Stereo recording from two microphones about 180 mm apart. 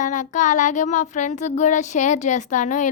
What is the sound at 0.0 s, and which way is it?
Child singing, 45° left (ahead or behind).